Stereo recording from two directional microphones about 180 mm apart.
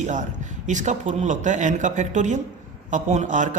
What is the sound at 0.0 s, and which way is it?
A man's voice, 45° right (ahead or behind).